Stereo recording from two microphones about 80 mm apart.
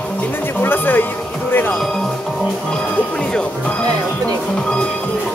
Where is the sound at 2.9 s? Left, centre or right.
Centre.